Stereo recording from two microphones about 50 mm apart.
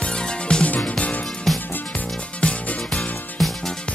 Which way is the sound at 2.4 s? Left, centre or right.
Left.